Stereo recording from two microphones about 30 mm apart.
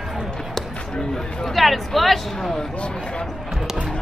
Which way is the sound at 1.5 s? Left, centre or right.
Centre.